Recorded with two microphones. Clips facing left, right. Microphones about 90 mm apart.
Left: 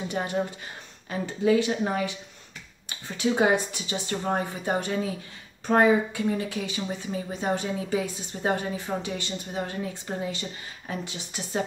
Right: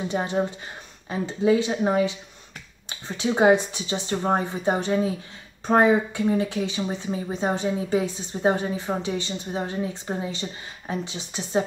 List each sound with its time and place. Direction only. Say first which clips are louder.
0.1 s speech: right 3 dB; 25° right (ahead or behind)
3.2 s speech: right 4 dB; 25° right (ahead or behind)